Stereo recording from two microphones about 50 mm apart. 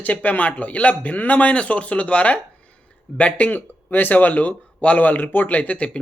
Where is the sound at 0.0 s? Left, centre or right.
Left.